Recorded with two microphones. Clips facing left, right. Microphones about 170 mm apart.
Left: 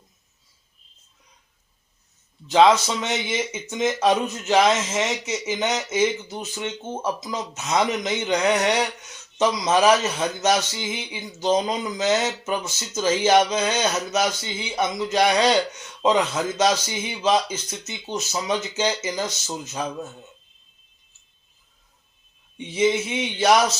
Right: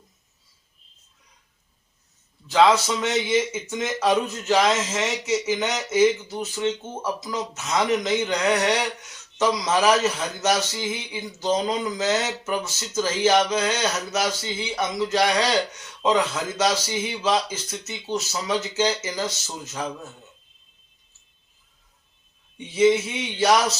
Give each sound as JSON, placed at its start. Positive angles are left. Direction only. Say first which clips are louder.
{"t": 2.5, "sound": "a man's voice", "louder": "left 2 dB", "side_deg": 20}
{"t": 22.5, "sound": "speech", "louder": "right 3 dB", "side_deg": 20}